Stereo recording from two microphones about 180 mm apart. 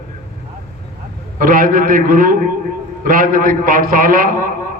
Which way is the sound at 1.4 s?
50° right (ahead or behind).